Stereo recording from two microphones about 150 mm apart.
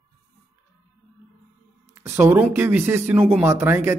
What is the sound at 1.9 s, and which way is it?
Speech, 15° right (ahead or behind).